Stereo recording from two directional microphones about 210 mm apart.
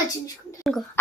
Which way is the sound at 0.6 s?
Centre (ahead or behind).